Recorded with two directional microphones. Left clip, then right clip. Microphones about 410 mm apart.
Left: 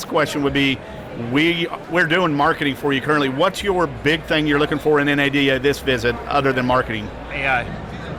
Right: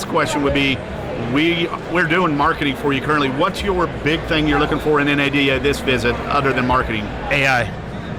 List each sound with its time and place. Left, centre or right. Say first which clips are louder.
0.1 s speech: right 1 dB; left
7.3 s speech: right 4 dB; right